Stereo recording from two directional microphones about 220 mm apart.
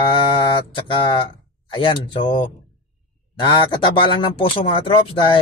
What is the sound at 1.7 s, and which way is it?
A man's voice, 20° left (ahead or behind).